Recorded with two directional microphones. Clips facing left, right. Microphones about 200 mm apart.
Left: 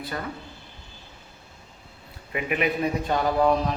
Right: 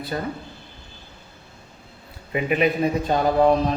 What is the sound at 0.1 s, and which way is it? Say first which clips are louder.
Speech: right 6 dB; 25° right (ahead or behind).